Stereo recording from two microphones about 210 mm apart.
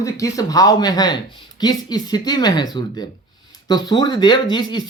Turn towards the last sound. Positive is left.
turn(degrees=20)  # may be behind; listen again after turning